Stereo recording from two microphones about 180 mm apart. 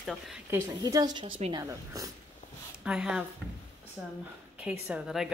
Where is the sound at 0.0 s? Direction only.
Centre (ahead or behind).